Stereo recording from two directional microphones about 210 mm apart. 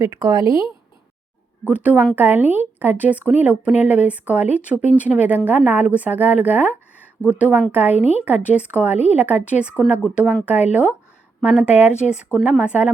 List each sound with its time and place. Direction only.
0.0 s speech: 15° right (ahead or behind)
1.6 s speech: 5° right (ahead or behind)
7.9 s a woman's voice: 30° left (ahead or behind)
8.2 s speech: 5° right (ahead or behind)